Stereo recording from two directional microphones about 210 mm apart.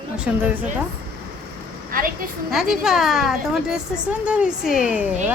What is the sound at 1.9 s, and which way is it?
Speech, 40° right (ahead or behind).